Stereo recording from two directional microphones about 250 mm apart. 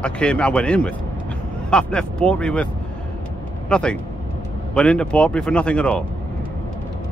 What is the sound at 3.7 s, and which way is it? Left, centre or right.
Speech, centre.